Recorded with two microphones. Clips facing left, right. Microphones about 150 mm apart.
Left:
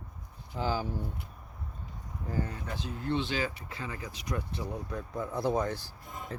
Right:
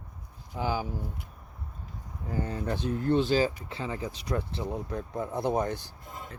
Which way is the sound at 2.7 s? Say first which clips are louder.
Right 9 dB; 50° right (ahead or behind).